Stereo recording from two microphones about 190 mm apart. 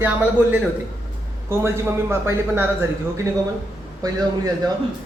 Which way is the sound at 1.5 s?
15° right (ahead or behind).